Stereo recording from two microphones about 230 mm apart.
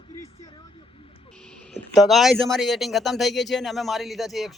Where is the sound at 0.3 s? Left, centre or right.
Left.